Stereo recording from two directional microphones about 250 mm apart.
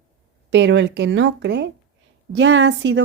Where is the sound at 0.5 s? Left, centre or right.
Right.